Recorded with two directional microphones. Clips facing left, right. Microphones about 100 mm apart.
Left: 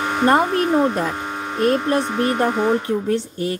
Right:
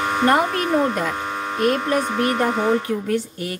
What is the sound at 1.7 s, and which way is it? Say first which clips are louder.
A woman's voice: left 2 dB; 25° left (ahead or behind).